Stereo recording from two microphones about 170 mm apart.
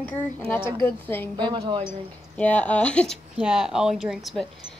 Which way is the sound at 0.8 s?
10° left (ahead or behind).